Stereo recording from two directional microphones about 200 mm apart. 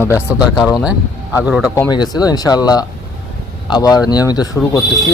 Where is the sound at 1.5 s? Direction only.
5° right (ahead or behind).